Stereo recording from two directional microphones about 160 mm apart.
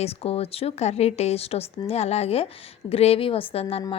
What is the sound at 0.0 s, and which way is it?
A woman's voice, 40° left (ahead or behind).